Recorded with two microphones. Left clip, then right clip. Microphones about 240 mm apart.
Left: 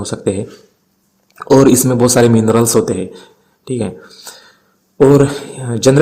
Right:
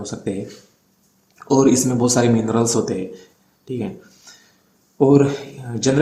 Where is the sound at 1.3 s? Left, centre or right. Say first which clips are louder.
Left 7 dB; left.